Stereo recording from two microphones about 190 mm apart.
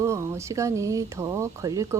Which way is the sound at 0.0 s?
15° right (ahead or behind).